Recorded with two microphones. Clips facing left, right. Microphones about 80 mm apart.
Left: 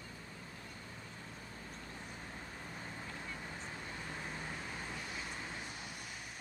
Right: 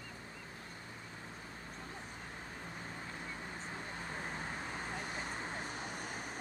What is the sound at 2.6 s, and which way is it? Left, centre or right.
Vehicle, right.